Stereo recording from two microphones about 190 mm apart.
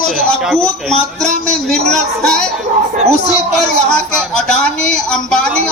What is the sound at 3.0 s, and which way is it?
Speech, 35° right (ahead or behind).